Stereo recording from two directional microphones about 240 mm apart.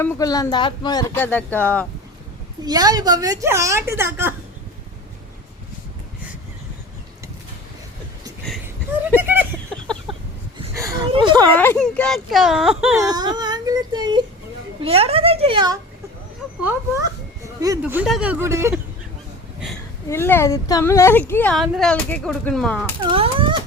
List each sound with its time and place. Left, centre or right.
0.0 s speech: centre
2.6 s speech: centre
9.1 s a sound: centre
9.8 s a sound: centre
10.8 s a sound: centre
11.5 s speech: centre
13.0 s a woman's voice: centre
17.6 s speech: centre
20.1 s speech: centre
23.0 s speech: right